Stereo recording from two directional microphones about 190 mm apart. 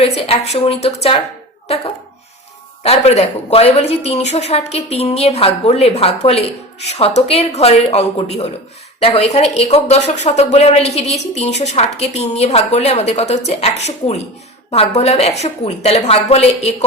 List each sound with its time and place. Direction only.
0.0 s a woman's voice: 30° left (ahead or behind)